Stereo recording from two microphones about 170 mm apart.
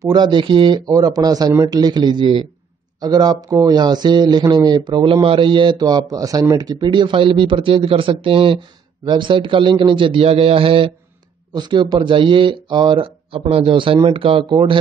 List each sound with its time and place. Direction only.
0.0 s a man's voice: 25° right (ahead or behind)